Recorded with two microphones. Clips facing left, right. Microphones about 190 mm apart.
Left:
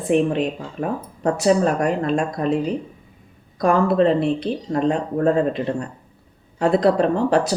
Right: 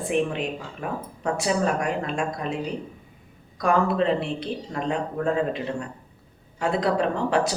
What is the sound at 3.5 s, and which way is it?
Speech, 40° left (ahead or behind).